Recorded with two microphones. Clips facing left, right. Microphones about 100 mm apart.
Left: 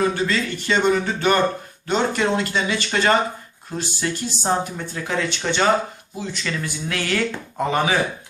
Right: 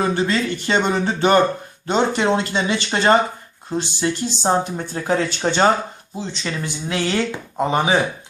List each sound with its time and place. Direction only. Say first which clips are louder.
0.0 s speech: right 2 dB; 30° right (ahead or behind)